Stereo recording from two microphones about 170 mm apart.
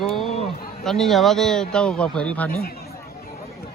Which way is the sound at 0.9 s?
Centre (ahead or behind).